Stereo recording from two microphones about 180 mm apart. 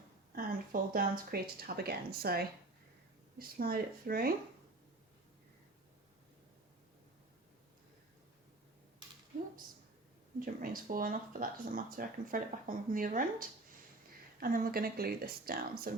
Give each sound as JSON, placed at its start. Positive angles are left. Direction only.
{"t": 0.3, "sound": "speech", "side_deg": -55}
{"t": 10.4, "sound": "speech", "side_deg": -50}
{"t": 14.3, "sound": "speech", "side_deg": -55}